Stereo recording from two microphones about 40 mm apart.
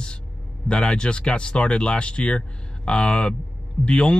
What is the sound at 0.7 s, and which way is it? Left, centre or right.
Speech, left.